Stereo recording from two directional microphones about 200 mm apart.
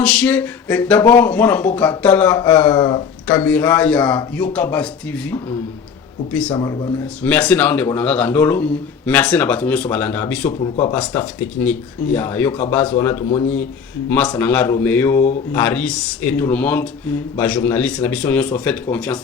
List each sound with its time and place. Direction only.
0.0 s a sound: 5° left (ahead or behind)
1.2 s speech: 5° left (ahead or behind)
2.7 s speech: 20° left (ahead or behind)
3.2 s speech: 5° left (ahead or behind)
6.5 s speech: 20° left (ahead or behind)
7.2 s speech: 5° left (ahead or behind)